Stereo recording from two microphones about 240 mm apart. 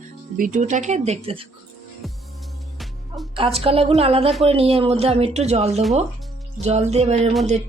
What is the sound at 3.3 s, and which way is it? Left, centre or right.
Speech, right.